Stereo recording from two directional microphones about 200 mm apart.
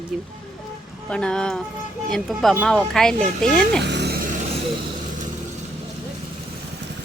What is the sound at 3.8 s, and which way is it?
Music, 60° right (ahead or behind).